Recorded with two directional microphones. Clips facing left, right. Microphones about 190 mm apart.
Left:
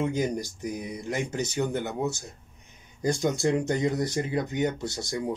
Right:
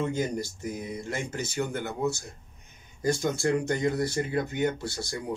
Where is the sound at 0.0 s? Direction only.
15° left (ahead or behind).